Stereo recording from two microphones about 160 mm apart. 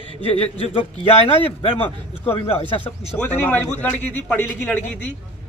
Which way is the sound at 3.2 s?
10° left (ahead or behind).